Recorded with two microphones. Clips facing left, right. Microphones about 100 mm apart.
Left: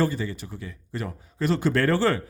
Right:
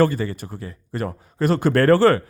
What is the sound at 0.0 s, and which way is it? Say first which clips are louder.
Speech: right 6 dB; 55° right (ahead or behind).